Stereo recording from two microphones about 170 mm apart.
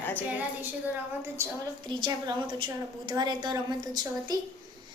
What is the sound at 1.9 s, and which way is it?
A woman's voice, 25° right (ahead or behind).